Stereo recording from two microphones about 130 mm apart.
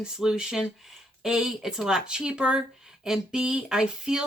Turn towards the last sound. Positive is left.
turn(degrees=-5)  # may be behind; listen again after turning